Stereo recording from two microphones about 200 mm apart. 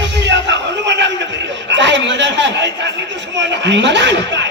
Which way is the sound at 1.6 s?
65° right (ahead or behind).